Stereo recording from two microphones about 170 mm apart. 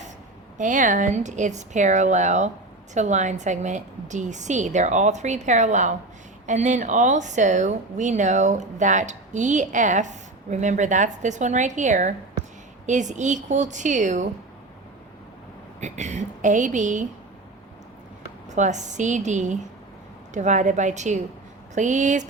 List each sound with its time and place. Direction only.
0.6 s speech: 50° right (ahead or behind)
15.8 s speech: 45° right (ahead or behind)
18.5 s speech: 45° right (ahead or behind)